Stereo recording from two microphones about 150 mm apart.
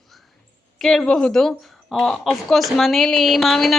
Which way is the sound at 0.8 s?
5° left (ahead or behind).